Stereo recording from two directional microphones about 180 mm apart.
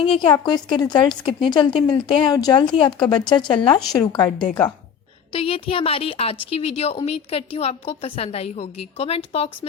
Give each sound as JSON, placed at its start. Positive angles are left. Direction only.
{"t": 0.0, "sound": "a woman's voice", "side_deg": 25}
{"t": 5.3, "sound": "a woman's voice", "side_deg": 30}